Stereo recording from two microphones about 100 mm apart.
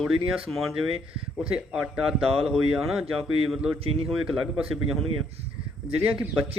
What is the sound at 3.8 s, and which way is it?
Speech, 70° right (ahead or behind).